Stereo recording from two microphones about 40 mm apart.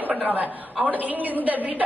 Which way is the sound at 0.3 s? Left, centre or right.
Right.